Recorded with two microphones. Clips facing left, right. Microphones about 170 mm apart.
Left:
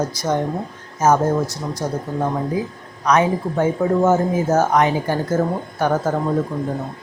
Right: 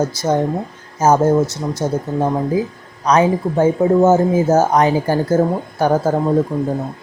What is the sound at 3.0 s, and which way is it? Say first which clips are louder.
Speech: right 3 dB; 30° right (ahead or behind).